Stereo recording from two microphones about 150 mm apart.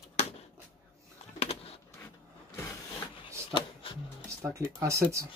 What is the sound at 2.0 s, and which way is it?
Printer, 15° left (ahead or behind).